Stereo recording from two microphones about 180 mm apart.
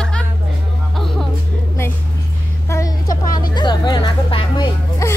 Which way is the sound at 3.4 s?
25° left (ahead or behind).